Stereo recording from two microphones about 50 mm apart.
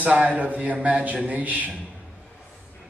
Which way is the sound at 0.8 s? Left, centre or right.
Right.